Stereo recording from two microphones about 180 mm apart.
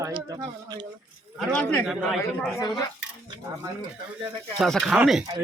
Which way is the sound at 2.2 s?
20° left (ahead or behind).